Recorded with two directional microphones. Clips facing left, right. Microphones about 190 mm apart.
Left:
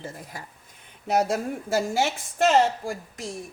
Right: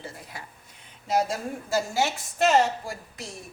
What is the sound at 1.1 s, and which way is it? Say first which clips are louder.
Speech: left 2 dB; 60° left (ahead or behind).